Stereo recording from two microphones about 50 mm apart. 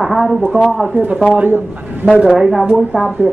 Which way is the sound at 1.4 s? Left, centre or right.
Right.